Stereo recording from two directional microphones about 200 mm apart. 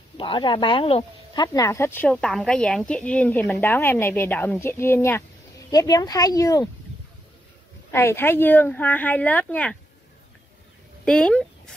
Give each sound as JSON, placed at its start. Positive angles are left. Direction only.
{"t": 0.2, "sound": "speech", "side_deg": 25}
{"t": 7.9, "sound": "speech", "side_deg": 10}
{"t": 11.1, "sound": "speech", "side_deg": 5}